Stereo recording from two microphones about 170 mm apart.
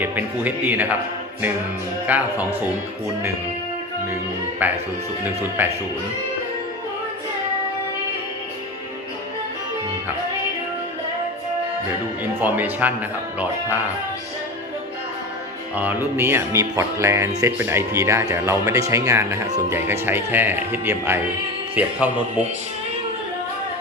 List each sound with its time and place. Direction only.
0.0 s music: 10° right (ahead or behind)
2.0 s music: 10° right (ahead or behind)
4.6 s music: 10° right (ahead or behind)
12.2 s music: 10° right (ahead or behind)
15.7 s music: 10° right (ahead or behind)